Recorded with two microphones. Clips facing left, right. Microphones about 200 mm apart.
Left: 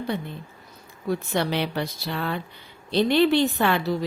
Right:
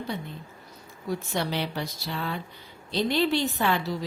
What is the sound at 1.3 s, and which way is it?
A woman's voice, 65° left (ahead or behind).